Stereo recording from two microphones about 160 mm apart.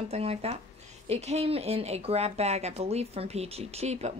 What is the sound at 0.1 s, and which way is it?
Speech, 40° right (ahead or behind).